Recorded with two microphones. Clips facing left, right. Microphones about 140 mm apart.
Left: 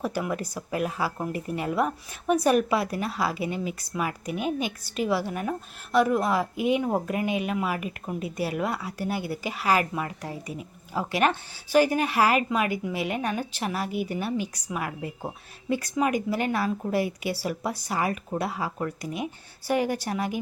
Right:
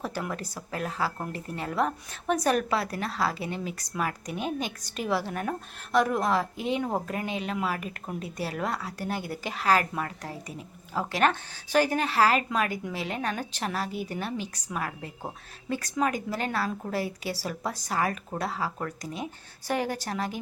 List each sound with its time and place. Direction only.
0.0 s speech: 10° left (ahead or behind)